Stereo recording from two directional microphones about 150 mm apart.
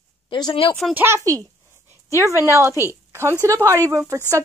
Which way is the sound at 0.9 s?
15° right (ahead or behind).